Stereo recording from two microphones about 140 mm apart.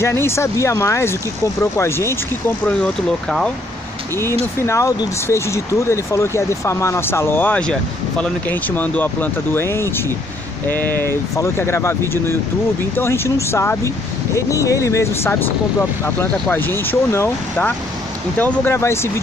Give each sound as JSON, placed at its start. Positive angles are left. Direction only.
{"t": 0.0, "sound": "speech", "side_deg": 20}
{"t": 2.8, "sound": "speech", "side_deg": 5}
{"t": 4.6, "sound": "speech", "side_deg": 20}